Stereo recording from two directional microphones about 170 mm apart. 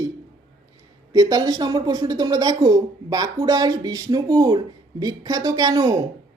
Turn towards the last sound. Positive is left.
turn(degrees=-20)  # may be behind; listen again after turning